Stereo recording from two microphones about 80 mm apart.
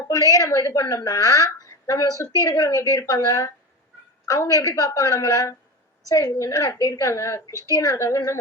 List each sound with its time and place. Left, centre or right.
0.1 s a woman's voice: left